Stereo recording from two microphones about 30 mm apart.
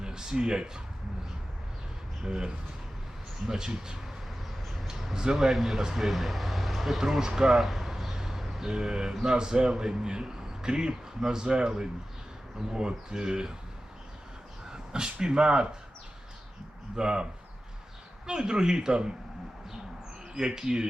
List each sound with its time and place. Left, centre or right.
0.0 s speech: right
3.4 s a man's voice: right
5.1 s a man's voice: right
5.5 s speech: centre
7.2 s a man's voice: right
7.6 s a sound: centre
8.7 s a man's voice: right
14.7 s speech: right
16.9 s a man's voice: right
18.3 s a man's voice: right
20.3 s a man's voice: right